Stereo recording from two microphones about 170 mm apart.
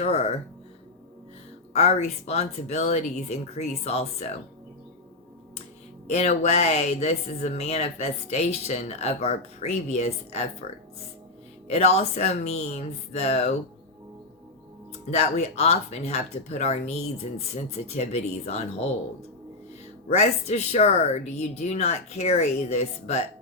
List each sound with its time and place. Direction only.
0.0 s speech: 40° left (ahead or behind)
1.7 s speech: 40° left (ahead or behind)
6.1 s speech: 40° left (ahead or behind)
11.7 s speech: 40° left (ahead or behind)
15.1 s speech: 40° left (ahead or behind)
20.1 s speech: 40° left (ahead or behind)